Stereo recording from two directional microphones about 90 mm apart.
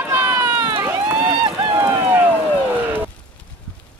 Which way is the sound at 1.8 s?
30° right (ahead or behind).